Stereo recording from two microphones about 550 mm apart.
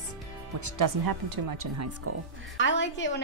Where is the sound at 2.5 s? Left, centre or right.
Centre.